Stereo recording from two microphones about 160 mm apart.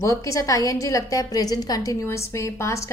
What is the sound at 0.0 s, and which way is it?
A woman's voice, 20° left (ahead or behind).